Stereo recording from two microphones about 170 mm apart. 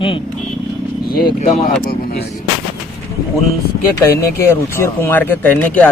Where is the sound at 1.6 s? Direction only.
65° left (ahead or behind).